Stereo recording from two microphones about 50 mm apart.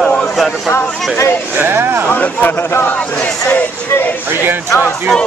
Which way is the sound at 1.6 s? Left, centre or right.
Right.